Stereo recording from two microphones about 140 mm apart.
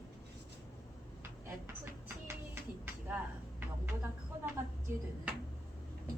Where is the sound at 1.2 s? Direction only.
15° right (ahead or behind).